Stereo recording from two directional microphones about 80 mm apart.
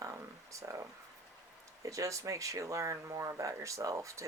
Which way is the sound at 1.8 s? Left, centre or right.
Right.